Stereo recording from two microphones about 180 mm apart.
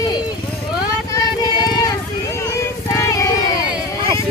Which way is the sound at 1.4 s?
20° left (ahead or behind).